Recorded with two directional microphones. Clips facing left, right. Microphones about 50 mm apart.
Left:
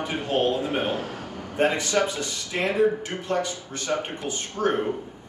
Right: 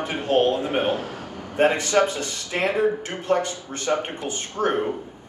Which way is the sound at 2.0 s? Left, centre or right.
Right.